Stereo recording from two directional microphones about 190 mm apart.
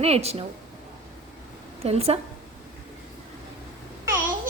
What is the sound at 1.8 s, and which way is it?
Speech, 30° right (ahead or behind).